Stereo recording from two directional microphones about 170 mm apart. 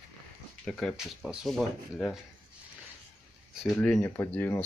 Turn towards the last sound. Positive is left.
turn(degrees=10)  # may be behind; listen again after turning